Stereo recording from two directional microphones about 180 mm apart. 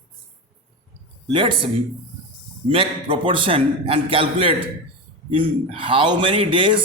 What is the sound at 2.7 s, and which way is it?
A man's voice, 30° right (ahead or behind).